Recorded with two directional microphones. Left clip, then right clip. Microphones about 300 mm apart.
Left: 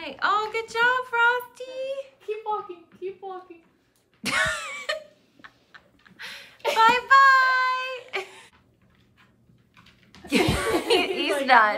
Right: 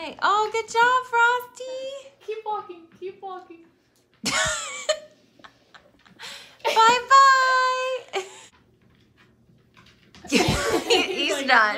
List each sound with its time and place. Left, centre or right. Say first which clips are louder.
0.0 s child singing: right 2 dB; centre
4.2 s a sound: even; centre
9.8 s speech: right 2 dB; centre